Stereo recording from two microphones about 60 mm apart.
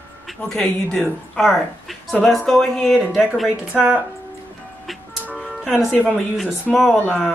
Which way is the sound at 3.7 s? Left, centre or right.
Right.